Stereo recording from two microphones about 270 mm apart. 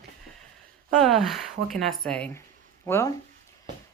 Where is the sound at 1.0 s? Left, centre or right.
Centre.